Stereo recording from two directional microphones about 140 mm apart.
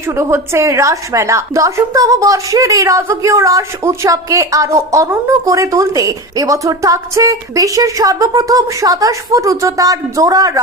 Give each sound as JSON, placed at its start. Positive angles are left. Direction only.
{"t": 0.1, "sound": "a woman's voice", "side_deg": -20}